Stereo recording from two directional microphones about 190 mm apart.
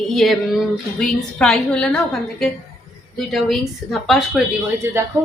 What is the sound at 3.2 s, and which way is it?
A woman's voice, centre (ahead or behind).